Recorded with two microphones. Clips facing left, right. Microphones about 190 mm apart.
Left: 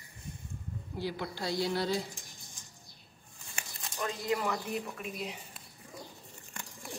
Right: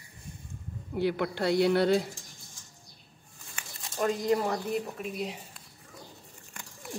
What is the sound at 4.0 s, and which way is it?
Speech, 40° right (ahead or behind).